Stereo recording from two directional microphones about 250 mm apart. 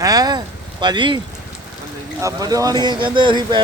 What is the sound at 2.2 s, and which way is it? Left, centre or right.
A man's voice, centre.